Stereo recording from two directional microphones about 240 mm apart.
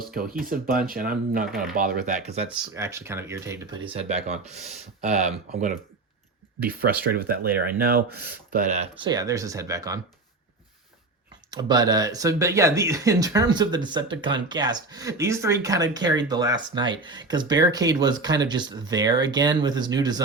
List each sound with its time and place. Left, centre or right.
0.4 s speech: right
1.5 s speech: centre
1.7 s speech: right
2.7 s speech: centre
3.9 s speech: right
6.7 s speech: right; by 10.0 s centre
11.5 s speech: centre